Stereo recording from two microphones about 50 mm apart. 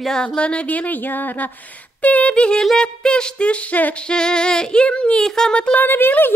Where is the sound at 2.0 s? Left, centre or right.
Left.